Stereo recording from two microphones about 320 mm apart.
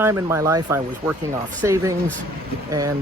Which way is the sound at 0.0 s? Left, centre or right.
Centre.